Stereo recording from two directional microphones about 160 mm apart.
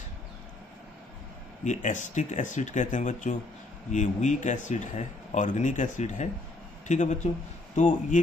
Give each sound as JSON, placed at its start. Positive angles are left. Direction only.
{"t": 1.6, "sound": "speech", "side_deg": 50}